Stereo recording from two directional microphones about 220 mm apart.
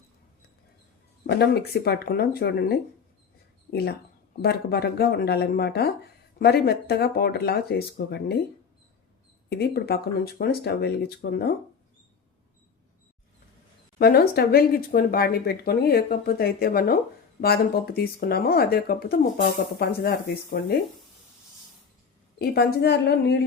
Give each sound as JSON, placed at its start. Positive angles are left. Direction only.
{"t": 1.3, "sound": "speech", "side_deg": 45}
{"t": 9.5, "sound": "speech", "side_deg": 45}
{"t": 14.0, "sound": "speech", "side_deg": 45}
{"t": 22.4, "sound": "speech", "side_deg": 45}